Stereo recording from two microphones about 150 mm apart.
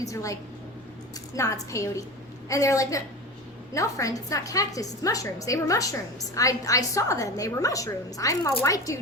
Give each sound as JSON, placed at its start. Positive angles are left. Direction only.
{"t": 0.0, "sound": "a woman's voice", "side_deg": 20}
{"t": 1.4, "sound": "a woman's voice", "side_deg": 20}